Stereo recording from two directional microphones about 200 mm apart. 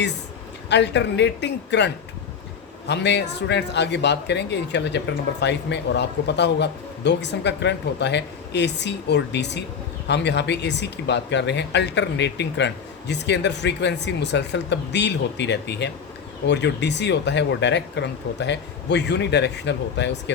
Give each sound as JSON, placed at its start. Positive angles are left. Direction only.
{"t": 0.7, "sound": "a man's voice", "side_deg": 60}